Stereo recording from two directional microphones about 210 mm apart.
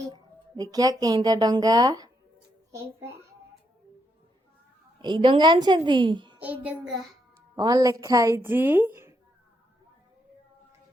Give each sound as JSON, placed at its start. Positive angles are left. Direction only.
{"t": 0.1, "sound": "speech", "side_deg": -20}
{"t": 5.0, "sound": "a woman's voice", "side_deg": -25}
{"t": 6.4, "sound": "speech", "side_deg": -5}
{"t": 7.5, "sound": "speech", "side_deg": -20}